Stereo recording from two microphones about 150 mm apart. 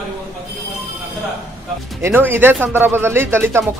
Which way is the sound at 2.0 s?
15° right (ahead or behind).